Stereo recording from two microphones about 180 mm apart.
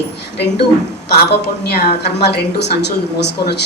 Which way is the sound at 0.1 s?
70° left (ahead or behind).